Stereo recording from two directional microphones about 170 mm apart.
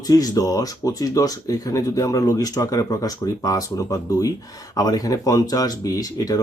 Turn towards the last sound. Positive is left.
turn(degrees=20)  # may be behind; listen again after turning